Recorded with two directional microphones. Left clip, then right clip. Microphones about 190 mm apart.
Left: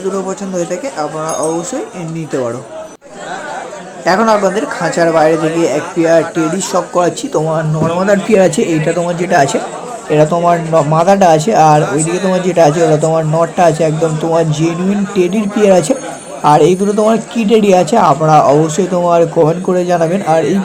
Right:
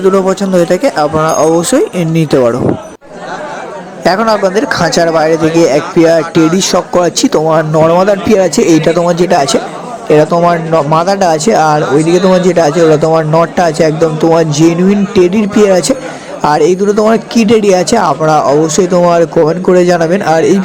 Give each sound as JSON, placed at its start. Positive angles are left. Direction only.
{"t": 0.1, "sound": "speech", "side_deg": -35}
{"t": 4.0, "sound": "speech", "side_deg": -40}